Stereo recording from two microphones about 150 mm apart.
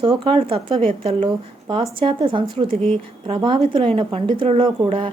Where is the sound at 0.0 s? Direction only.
35° right (ahead or behind).